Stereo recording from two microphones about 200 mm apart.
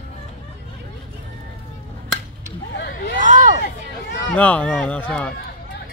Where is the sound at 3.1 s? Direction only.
40° right (ahead or behind).